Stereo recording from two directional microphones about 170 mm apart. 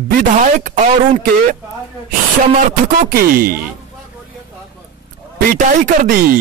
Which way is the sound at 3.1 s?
60° right (ahead or behind).